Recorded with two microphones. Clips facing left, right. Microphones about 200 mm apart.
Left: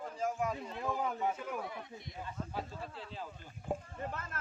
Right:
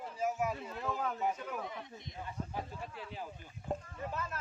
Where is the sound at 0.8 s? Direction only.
15° left (ahead or behind).